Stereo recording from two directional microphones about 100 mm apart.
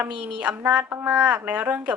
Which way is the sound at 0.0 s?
10° right (ahead or behind).